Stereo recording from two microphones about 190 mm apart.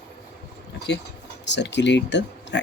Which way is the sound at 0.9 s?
65° left (ahead or behind).